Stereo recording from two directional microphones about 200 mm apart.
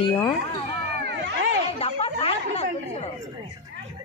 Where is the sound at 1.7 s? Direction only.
30° left (ahead or behind).